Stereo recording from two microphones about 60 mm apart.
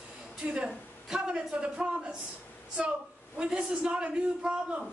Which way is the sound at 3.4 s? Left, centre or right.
Centre.